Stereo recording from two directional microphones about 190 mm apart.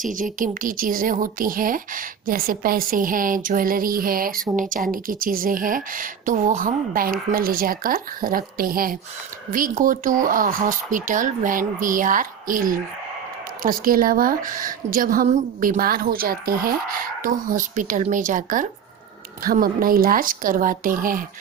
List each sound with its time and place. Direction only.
0.0 s a woman's voice: 45° right (ahead or behind)